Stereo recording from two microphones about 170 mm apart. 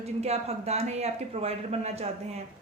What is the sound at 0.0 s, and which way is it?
Speech, 40° right (ahead or behind).